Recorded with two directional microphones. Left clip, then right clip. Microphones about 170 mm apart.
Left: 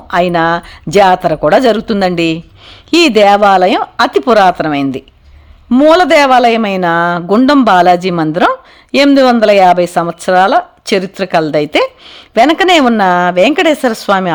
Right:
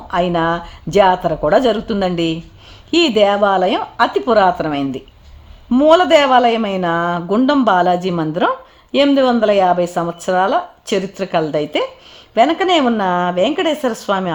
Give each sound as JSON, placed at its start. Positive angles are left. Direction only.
{"t": 0.1, "sound": "speech", "side_deg": 20}